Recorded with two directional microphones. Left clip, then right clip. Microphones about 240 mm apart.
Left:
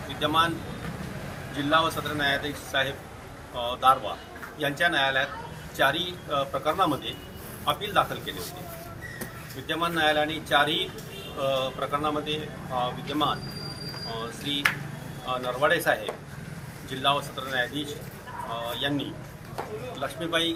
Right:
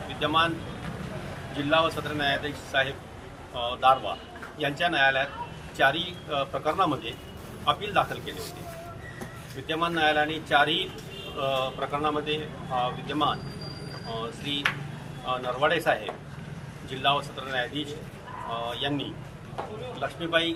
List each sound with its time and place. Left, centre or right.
0.2 s a man's voice: centre
1.5 s a man's voice: centre
9.6 s a man's voice: centre
17.0 s a man's voice: centre